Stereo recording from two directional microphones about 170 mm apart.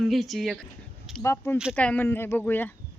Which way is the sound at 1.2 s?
15° left (ahead or behind).